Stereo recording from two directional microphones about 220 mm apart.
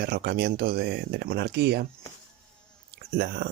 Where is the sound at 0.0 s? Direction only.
45° right (ahead or behind).